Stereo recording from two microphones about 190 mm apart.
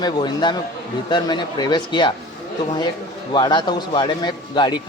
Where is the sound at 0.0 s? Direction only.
20° left (ahead or behind).